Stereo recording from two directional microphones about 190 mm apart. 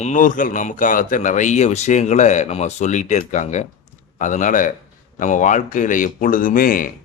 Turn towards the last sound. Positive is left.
turn(degrees=45)  # may be behind; listen again after turning